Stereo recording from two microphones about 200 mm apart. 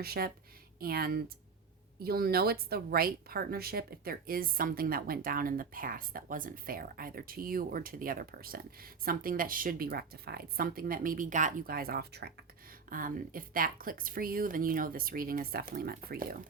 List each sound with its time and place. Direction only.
0.0 s a woman's voice: 50° right (ahead or behind)